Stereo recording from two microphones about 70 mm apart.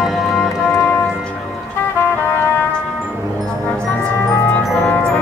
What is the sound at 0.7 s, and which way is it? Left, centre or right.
Music, left.